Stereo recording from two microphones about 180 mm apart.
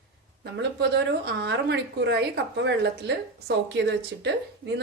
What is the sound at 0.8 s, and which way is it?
A woman's voice, 70° right (ahead or behind).